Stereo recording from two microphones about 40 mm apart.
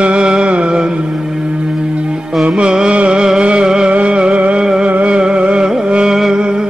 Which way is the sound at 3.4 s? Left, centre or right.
Right.